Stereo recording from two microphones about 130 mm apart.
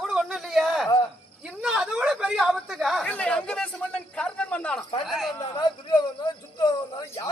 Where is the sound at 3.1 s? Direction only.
10° left (ahead or behind).